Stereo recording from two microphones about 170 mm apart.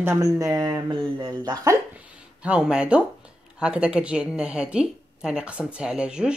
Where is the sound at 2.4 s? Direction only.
5° right (ahead or behind).